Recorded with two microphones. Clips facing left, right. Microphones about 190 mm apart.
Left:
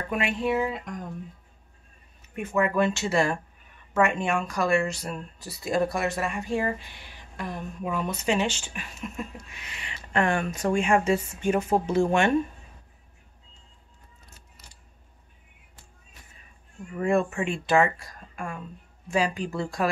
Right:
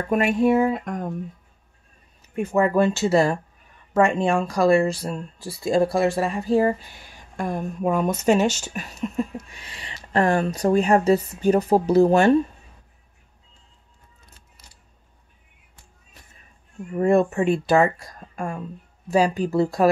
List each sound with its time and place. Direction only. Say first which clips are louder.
0.1 s music: right 8 dB; 45° right (ahead or behind)
2.3 s speech: right 5 dB; 35° right (ahead or behind)
16.9 s speech: right 6 dB; 40° right (ahead or behind)